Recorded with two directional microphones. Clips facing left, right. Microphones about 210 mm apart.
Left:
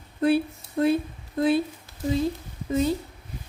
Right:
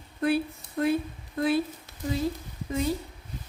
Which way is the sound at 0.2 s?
30° left (ahead or behind).